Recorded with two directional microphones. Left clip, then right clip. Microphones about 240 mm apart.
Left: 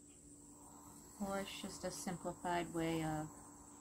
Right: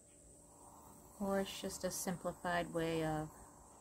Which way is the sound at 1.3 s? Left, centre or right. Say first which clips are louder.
Right 5 dB; right.